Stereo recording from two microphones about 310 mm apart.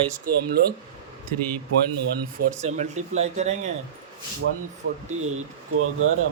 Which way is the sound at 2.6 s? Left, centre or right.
Right.